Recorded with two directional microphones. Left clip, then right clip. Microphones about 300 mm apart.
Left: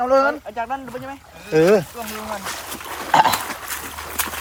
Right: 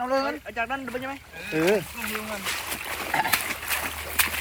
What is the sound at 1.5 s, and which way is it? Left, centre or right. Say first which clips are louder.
Speech: left 8 dB; centre.